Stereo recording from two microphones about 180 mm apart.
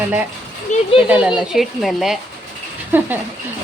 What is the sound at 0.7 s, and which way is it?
Speech, 40° left (ahead or behind).